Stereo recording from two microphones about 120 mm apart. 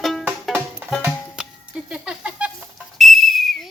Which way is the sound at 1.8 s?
10° right (ahead or behind).